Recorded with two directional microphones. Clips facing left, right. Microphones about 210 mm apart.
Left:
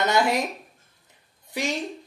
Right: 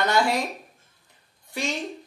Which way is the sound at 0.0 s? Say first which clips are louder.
Left 1 dB; 20° left (ahead or behind).